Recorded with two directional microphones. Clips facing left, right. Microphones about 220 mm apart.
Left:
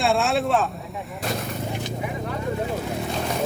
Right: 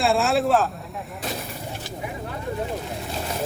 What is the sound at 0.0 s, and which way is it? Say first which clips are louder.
Speech: right 1 dB; centre (ahead or behind).